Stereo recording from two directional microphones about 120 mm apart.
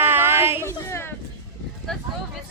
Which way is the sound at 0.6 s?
20° left (ahead or behind).